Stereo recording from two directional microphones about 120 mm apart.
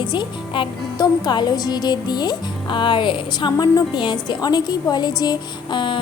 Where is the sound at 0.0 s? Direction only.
40° left (ahead or behind).